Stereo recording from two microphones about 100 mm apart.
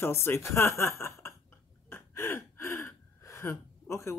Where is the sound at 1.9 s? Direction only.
25° left (ahead or behind).